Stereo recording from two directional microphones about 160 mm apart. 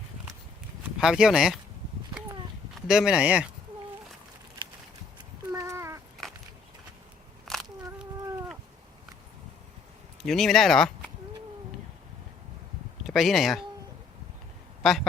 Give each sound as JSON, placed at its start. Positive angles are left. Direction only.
{"t": 1.0, "sound": "speech", "side_deg": -5}
{"t": 2.7, "sound": "speech", "side_deg": 0}
{"t": 5.5, "sound": "cat", "side_deg": -20}
{"t": 7.5, "sound": "a sound", "side_deg": 0}
{"t": 10.2, "sound": "speech", "side_deg": 0}
{"t": 13.1, "sound": "speech", "side_deg": 0}
{"t": 14.8, "sound": "speech", "side_deg": 0}